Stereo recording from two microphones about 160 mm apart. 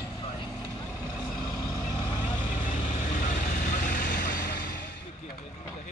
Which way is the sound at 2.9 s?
55° left (ahead or behind).